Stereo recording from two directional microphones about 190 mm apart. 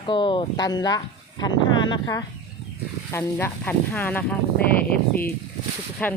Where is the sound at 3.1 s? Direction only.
15° left (ahead or behind).